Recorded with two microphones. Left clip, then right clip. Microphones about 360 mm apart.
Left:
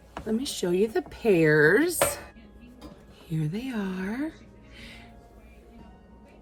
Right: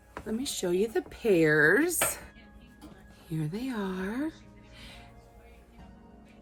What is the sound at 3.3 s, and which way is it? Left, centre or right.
Speech, centre.